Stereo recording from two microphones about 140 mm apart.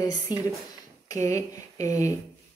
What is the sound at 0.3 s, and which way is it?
Speech, 30° left (ahead or behind).